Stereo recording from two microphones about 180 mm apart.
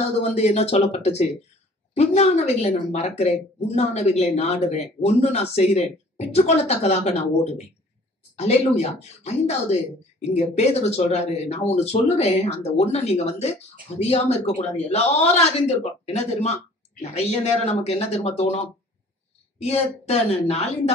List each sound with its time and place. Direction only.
0.2 s speech: 35° left (ahead or behind)
19.6 s speech: 35° left (ahead or behind)